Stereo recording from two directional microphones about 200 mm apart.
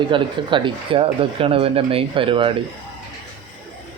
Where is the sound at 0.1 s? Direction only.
25° right (ahead or behind).